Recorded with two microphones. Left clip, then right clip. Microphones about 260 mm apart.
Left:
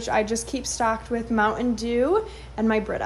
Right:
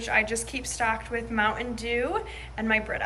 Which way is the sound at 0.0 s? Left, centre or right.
Centre.